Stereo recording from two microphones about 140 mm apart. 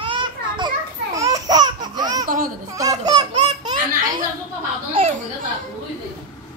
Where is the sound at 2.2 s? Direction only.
85° right.